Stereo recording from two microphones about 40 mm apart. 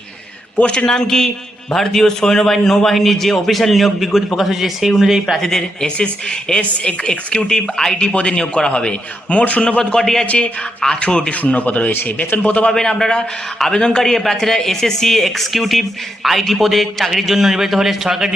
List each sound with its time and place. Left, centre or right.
0.5 s speech: left
0.9 s a man's voice: centre
5.5 s speech: centre
6.0 s a man's voice: left
7.0 s a man's voice: centre
10.0 s speech: centre
10.3 s a man's voice: left
12.5 s a man's voice: left
12.7 s a man's voice: centre